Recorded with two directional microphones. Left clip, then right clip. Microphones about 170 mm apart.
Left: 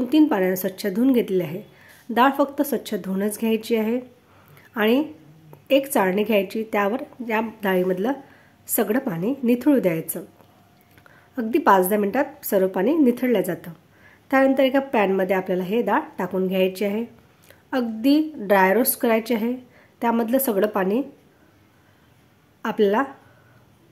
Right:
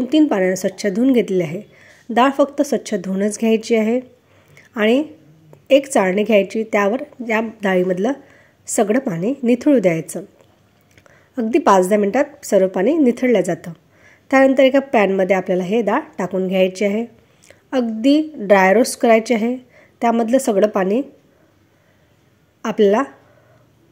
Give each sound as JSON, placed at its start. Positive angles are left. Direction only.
{"t": 0.0, "sound": "a woman's voice", "side_deg": -15}
{"t": 4.6, "sound": "a sound", "side_deg": -15}
{"t": 5.7, "sound": "a woman's voice", "side_deg": -15}
{"t": 22.6, "sound": "speech", "side_deg": -20}